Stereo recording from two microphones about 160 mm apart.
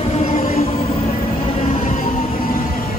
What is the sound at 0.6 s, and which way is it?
Train, 40° left (ahead or behind).